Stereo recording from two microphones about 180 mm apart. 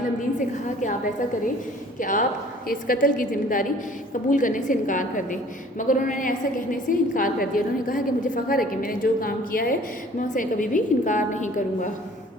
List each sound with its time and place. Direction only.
0.3 s a woman's voice: 45° left (ahead or behind)
2.0 s a woman's voice: 45° left (ahead or behind)